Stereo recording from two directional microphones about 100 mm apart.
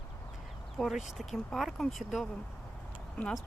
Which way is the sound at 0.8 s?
5° right (ahead or behind).